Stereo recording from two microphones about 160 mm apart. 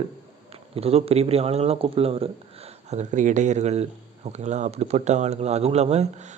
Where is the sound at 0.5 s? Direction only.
40° right (ahead or behind).